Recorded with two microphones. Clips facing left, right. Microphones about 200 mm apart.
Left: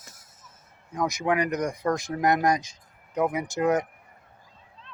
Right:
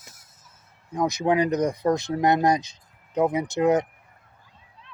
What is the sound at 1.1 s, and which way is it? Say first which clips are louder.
Speech: right 4 dB; 25° right (ahead or behind).